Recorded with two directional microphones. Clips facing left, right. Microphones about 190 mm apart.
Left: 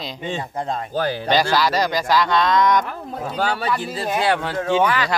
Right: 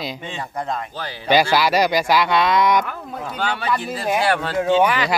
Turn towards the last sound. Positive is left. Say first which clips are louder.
# right 2 dB
turn(degrees=-15)  # may be behind; listen again after turning